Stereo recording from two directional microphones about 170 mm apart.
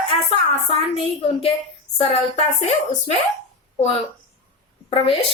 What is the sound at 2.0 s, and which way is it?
Speech, 40° left (ahead or behind).